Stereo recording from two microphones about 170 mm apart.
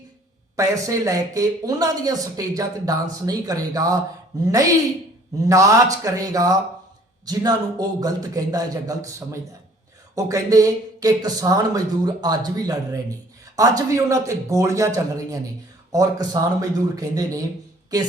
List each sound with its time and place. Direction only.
0.5 s speech: 20° right (ahead or behind)
5.5 s speech: 20° right (ahead or behind)